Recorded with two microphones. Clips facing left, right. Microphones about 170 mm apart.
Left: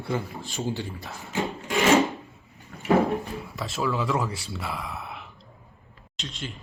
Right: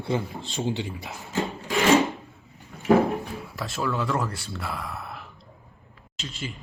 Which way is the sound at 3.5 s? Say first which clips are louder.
Left 1 dB; centre (ahead or behind).